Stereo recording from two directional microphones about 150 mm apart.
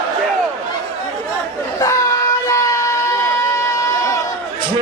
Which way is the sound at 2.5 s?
20° left (ahead or behind).